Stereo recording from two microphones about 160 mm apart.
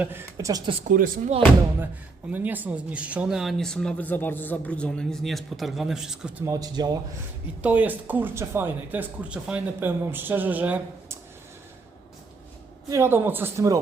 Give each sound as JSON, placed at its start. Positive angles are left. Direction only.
{"t": 0.0, "sound": "speech", "side_deg": -15}
{"t": 0.9, "sound": "speech", "side_deg": -60}
{"t": 2.3, "sound": "speech", "side_deg": -10}
{"t": 6.4, "sound": "speech", "side_deg": -25}
{"t": 7.6, "sound": "speech", "side_deg": -10}
{"t": 12.9, "sound": "speech", "side_deg": -15}